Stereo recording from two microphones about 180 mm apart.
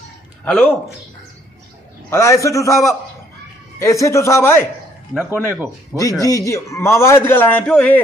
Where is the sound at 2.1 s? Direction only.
15° left (ahead or behind).